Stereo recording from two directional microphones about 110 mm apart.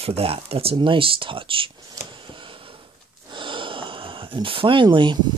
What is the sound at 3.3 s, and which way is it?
Speech, 50° right (ahead or behind).